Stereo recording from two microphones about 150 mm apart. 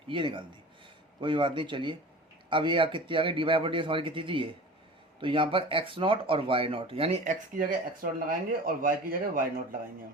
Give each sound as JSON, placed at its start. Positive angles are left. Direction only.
{"t": 0.1, "sound": "speech", "side_deg": -35}
{"t": 7.3, "sound": "speech", "side_deg": -65}